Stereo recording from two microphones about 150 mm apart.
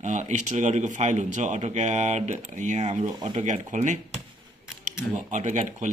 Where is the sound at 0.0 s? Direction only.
55° right (ahead or behind).